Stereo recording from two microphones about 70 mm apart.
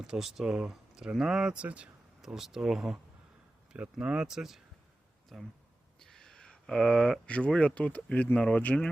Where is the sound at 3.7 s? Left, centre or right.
Centre.